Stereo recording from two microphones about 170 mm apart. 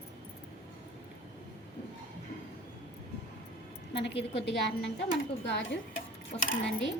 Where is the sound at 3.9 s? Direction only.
90° left.